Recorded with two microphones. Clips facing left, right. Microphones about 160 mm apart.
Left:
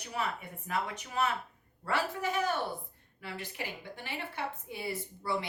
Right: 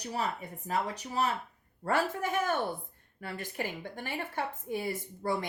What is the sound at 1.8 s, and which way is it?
A woman's voice, 45° right (ahead or behind).